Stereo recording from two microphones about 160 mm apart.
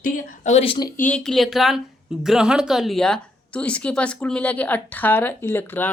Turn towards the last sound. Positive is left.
turn(degrees=10)  # may be behind; listen again after turning